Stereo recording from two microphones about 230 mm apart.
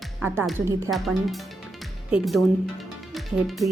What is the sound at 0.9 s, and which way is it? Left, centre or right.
Music, centre.